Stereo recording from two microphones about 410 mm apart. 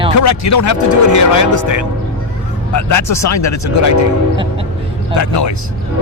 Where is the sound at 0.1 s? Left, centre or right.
Left.